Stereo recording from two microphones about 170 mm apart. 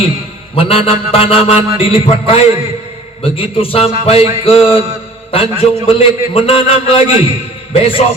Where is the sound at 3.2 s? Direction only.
35° left (ahead or behind).